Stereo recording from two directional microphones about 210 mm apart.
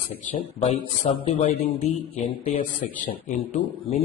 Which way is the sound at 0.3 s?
30° left (ahead or behind).